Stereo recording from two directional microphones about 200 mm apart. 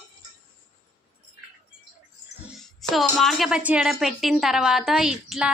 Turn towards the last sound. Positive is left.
turn(degrees=-5)  # may be behind; listen again after turning